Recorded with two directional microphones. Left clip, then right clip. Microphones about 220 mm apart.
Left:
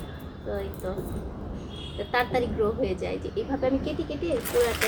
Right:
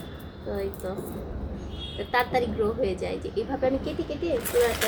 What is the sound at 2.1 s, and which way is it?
A woman's voice, 10° right (ahead or behind).